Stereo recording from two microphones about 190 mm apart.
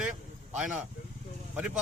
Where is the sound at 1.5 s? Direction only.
5° right (ahead or behind).